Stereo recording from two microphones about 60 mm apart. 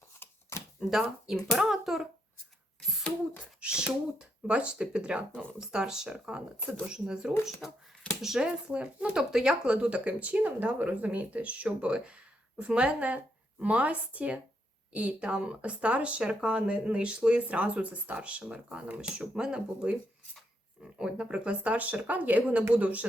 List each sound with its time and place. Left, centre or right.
0.2 s a sound: left
1.3 s speech: centre
3.4 s speech: centre
5.5 s speech: centre
21.0 s speech: centre